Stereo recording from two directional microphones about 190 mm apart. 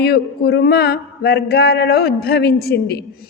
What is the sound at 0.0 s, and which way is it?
A woman's voice, 55° left (ahead or behind).